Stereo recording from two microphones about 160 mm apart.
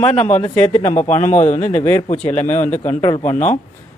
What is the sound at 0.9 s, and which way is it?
Speech, 45° left (ahead or behind).